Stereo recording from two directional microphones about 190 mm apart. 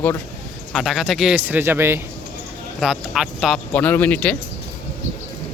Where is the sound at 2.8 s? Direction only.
Centre (ahead or behind).